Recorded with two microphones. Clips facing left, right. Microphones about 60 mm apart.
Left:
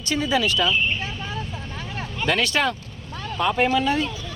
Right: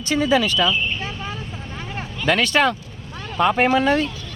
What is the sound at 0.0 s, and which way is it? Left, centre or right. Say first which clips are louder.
Speech: right 4 dB; right.